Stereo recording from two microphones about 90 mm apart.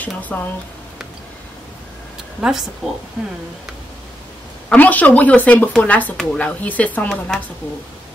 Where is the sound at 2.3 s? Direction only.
10° right (ahead or behind).